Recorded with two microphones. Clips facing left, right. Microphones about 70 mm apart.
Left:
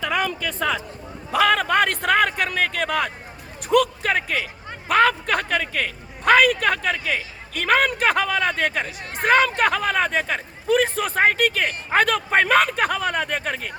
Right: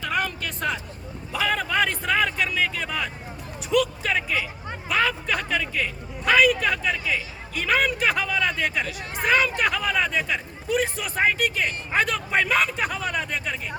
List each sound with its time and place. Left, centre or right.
1.3 s a man's voice: left
3.7 s speech: left